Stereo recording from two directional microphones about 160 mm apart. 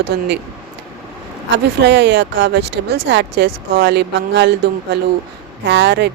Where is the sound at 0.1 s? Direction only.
90° right.